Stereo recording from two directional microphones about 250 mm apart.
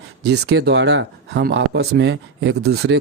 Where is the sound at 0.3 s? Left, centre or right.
Right.